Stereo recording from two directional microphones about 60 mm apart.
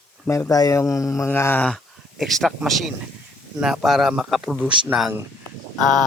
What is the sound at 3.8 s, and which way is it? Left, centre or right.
Speech, centre.